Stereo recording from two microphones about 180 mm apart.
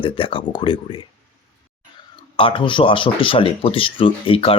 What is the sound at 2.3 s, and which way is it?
Speech, 30° left (ahead or behind).